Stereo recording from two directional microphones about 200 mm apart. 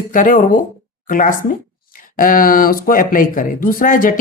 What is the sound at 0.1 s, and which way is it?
Speech, 40° left (ahead or behind).